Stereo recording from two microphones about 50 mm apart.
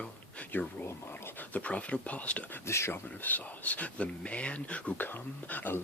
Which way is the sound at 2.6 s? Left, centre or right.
Left.